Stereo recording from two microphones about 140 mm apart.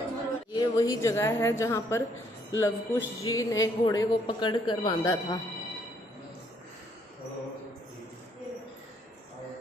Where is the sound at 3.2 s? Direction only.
25° left (ahead or behind).